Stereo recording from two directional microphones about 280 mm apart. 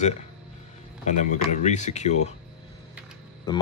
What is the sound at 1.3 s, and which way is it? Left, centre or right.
Speech, left.